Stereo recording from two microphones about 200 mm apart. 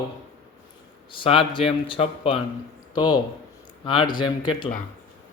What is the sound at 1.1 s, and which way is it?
Speech, 25° left (ahead or behind).